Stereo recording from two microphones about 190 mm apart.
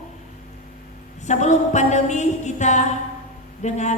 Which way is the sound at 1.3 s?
40° left (ahead or behind).